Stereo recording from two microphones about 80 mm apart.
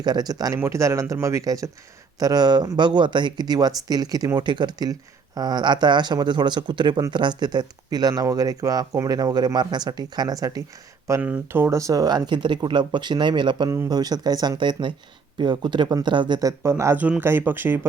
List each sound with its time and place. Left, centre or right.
0.0 s speech: right
0.6 s speech: right
2.1 s speech: right
4.4 s speech: right
11.2 s speech: centre
11.6 s speech: right
13.8 s speech: right
14.6 s speech: right
16.4 s speech: right
17.0 s speech: right